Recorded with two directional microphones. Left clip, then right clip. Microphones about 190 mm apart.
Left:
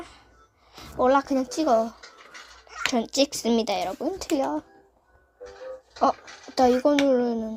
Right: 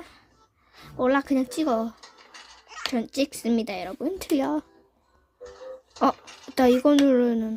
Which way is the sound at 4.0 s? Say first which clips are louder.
Even; 45° right (ahead or behind).